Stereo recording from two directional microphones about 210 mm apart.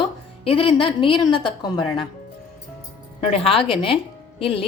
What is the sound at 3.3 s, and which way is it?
Speech, 25° left (ahead or behind).